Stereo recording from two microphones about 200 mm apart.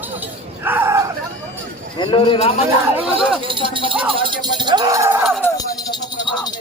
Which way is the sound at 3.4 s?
25° right (ahead or behind).